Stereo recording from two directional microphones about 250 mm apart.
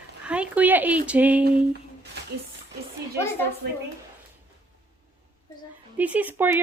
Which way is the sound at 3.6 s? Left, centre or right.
Right.